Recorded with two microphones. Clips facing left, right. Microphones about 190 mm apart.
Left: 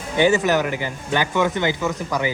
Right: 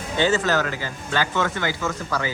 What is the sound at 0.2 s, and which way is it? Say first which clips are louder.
Speech: left 4 dB; 15° left (ahead or behind).